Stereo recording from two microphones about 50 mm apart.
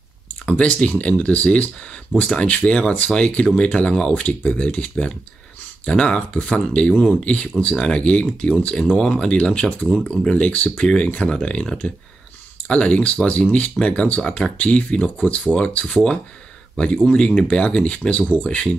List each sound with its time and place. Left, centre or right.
0.5 s speech: left